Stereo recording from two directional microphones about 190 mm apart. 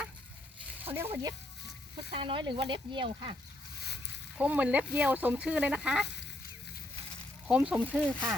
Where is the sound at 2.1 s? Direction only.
25° right (ahead or behind).